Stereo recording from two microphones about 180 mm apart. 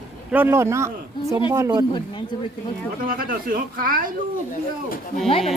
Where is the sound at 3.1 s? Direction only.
55° right (ahead or behind).